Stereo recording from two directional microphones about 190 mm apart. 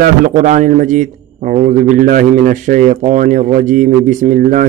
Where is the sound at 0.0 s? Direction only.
45° right (ahead or behind).